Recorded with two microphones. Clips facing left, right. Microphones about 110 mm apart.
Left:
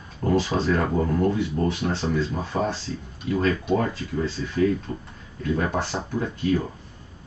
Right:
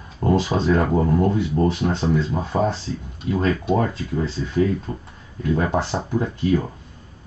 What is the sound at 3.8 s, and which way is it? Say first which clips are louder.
Speech: right 3 dB; 30° right (ahead or behind).